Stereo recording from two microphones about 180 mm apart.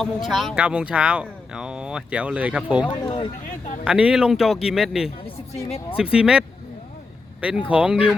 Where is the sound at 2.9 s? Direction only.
25° left (ahead or behind).